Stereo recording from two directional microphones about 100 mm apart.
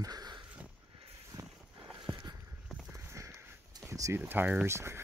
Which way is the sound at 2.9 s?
30° right (ahead or behind).